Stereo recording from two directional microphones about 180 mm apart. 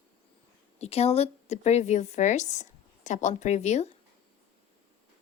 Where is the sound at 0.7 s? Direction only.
35° left (ahead or behind).